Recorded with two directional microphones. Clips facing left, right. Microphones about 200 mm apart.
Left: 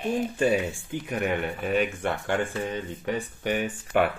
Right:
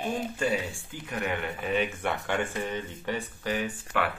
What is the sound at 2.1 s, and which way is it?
Speech, 20° right (ahead or behind).